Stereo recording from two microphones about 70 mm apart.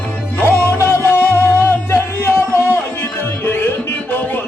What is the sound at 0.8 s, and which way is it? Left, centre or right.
Music, left.